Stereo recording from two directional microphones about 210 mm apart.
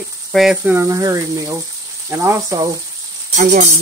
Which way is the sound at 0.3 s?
Centre (ahead or behind).